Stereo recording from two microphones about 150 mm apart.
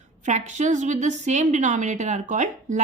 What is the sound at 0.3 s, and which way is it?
A woman's voice, 50° right (ahead or behind).